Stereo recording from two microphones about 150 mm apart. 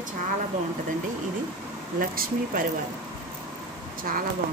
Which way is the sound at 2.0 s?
70° right (ahead or behind).